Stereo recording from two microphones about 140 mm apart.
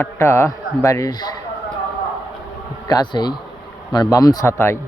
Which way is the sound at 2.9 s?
30° left (ahead or behind).